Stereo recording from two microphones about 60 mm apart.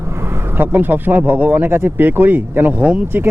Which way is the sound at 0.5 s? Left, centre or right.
Right.